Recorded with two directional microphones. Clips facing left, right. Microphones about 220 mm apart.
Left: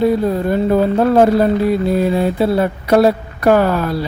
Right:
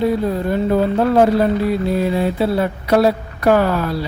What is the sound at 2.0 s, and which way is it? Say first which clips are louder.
Speech: left 3 dB; 45° left (ahead or behind).